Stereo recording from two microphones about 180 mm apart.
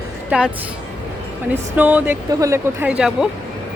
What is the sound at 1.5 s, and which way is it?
Speech, 10° right (ahead or behind).